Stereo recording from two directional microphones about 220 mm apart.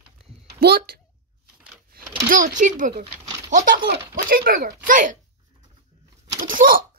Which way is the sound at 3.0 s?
20° right (ahead or behind).